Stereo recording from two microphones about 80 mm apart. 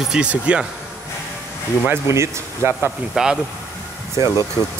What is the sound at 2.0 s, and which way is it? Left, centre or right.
Speech, right.